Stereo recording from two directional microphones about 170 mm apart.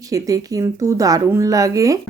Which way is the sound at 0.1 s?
20° right (ahead or behind).